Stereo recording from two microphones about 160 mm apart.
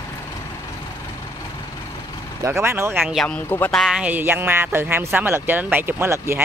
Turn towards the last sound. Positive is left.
turn(degrees=-15)  # may be behind; listen again after turning